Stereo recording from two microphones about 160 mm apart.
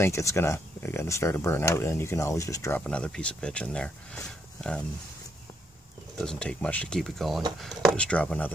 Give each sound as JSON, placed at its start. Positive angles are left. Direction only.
{"t": 0.0, "sound": "speech", "side_deg": 20}
{"t": 2.8, "sound": "speech", "side_deg": 5}
{"t": 6.1, "sound": "speech", "side_deg": 5}